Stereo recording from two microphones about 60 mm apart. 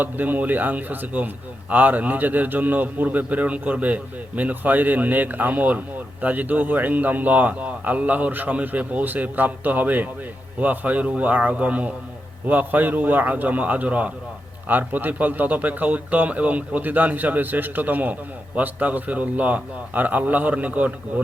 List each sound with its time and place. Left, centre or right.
0.0 s speech: right